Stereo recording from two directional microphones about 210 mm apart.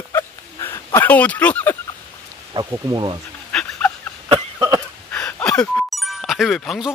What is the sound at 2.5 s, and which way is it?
Speech, 20° right (ahead or behind).